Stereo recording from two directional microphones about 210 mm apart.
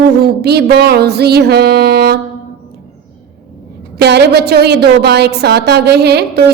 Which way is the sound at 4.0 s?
50° right (ahead or behind).